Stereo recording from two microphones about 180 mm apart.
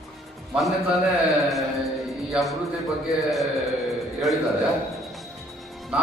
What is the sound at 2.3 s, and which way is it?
Music, centre (ahead or behind).